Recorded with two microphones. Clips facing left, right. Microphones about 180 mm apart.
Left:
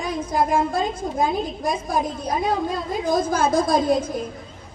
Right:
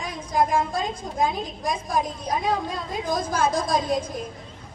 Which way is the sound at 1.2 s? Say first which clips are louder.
Left 2 dB; 5° left (ahead or behind).